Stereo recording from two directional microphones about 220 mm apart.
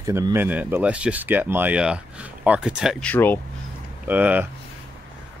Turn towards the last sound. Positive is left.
turn(degrees=-5)  # may be behind; listen again after turning